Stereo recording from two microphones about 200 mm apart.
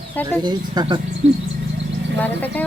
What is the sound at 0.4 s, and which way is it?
Speech, 20° right (ahead or behind).